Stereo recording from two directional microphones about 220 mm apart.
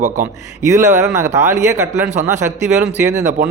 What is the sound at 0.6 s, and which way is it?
Speech, 10° right (ahead or behind).